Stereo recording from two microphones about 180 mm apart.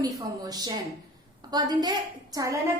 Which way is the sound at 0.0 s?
20° right (ahead or behind).